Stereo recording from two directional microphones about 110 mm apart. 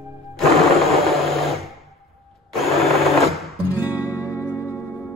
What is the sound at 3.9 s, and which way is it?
Music, 15° right (ahead or behind).